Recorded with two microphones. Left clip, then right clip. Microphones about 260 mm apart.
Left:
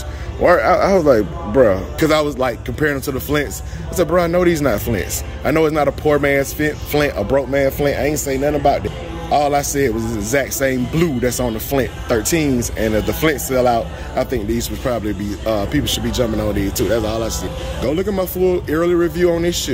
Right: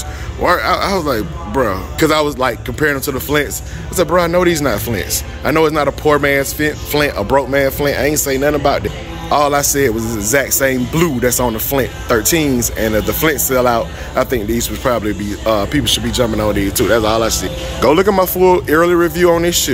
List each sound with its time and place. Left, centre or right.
0.4 s speech: centre